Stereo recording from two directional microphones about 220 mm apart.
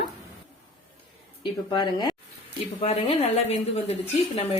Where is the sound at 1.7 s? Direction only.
20° left (ahead or behind).